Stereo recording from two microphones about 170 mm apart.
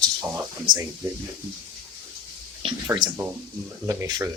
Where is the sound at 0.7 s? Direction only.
55° right (ahead or behind).